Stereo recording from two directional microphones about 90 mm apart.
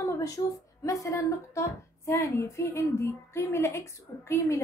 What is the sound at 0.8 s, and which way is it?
A woman's voice, 35° left (ahead or behind).